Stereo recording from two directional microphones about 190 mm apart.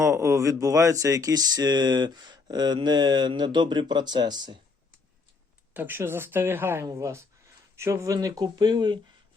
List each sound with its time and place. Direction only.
0.0 s speech: 15° right (ahead or behind)
5.7 s speech: 10° right (ahead or behind)